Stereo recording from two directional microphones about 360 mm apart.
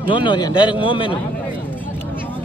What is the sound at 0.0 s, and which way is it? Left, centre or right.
A man's voice, centre.